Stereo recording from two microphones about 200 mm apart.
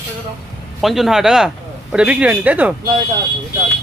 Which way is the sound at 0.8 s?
Centre (ahead or behind).